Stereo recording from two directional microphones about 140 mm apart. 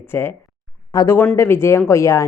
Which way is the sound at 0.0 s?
15° left (ahead or behind).